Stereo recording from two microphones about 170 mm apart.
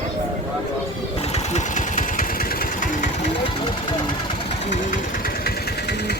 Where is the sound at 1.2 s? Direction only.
40° left (ahead or behind).